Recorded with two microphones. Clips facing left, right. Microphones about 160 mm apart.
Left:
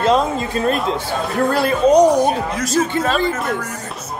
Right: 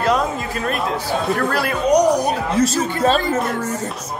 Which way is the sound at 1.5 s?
25° left (ahead or behind).